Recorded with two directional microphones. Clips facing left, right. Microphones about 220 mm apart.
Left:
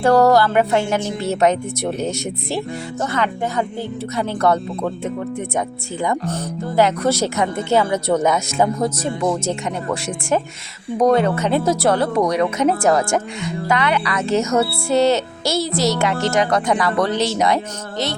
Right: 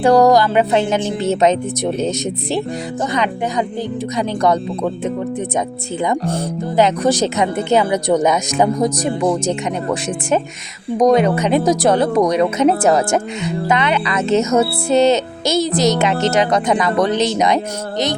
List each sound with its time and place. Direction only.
0.0 s speech: 15° right (ahead or behind)